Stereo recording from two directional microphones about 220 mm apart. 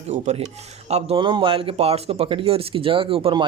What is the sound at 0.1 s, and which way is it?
A man's voice, 30° right (ahead or behind).